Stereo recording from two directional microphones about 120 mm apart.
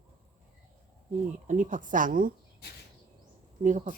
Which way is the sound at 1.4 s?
90° right.